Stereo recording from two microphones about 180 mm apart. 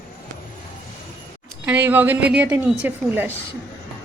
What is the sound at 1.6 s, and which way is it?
Speech, 10° right (ahead or behind).